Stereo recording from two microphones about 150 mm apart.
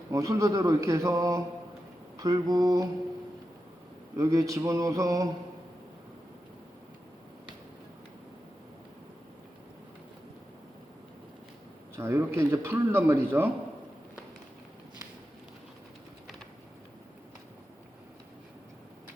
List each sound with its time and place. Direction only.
0.1 s speech: 20° right (ahead or behind)
4.2 s speech: 25° right (ahead or behind)
11.9 s speech: 15° right (ahead or behind)